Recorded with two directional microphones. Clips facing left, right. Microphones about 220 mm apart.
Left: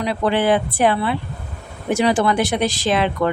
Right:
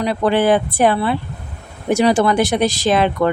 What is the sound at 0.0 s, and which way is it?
Speech, 45° right (ahead or behind).